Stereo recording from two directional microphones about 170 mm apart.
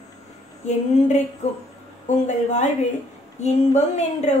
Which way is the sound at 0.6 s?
45° left (ahead or behind).